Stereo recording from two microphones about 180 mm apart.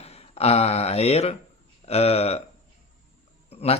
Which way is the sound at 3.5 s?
35° left (ahead or behind).